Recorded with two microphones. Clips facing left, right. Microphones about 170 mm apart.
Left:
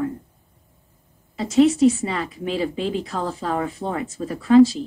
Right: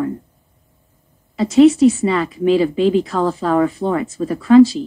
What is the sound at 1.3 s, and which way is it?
Speech, 90° right.